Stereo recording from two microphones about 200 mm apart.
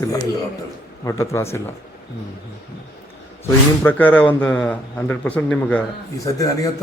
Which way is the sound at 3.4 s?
10° left (ahead or behind).